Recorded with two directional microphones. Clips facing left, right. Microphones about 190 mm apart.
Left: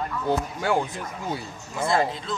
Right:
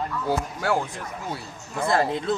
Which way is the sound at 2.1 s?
55° right (ahead or behind).